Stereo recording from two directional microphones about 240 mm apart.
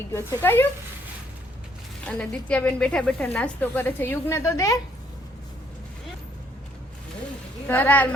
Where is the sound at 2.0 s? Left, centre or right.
Centre.